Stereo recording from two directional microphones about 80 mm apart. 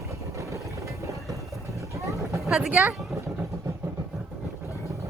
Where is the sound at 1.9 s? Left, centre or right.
Right.